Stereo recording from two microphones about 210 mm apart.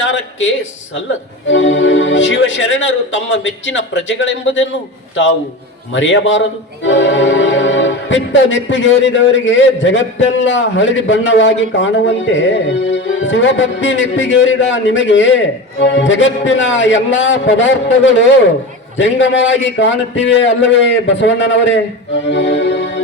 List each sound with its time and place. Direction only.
0.0 s a man's voice: 60° left (ahead or behind)
5.9 s speech: 65° left (ahead or behind)
22.3 s music: 60° left (ahead or behind)